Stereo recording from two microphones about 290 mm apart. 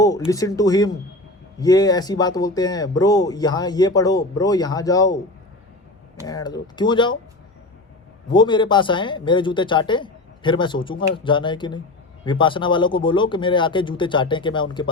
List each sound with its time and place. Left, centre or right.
0.3 s speech: centre
6.2 s speech: centre
8.3 s speech: centre